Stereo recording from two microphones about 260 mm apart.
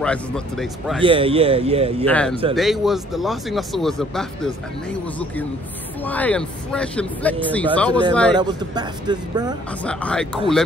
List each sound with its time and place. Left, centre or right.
0.0 s speech: centre
1.0 s a man's voice: right
2.0 s speech: centre
8.4 s speech: centre
9.8 s speech: centre